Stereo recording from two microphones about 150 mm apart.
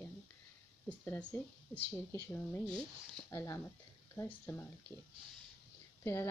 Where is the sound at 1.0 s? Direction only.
10° left (ahead or behind).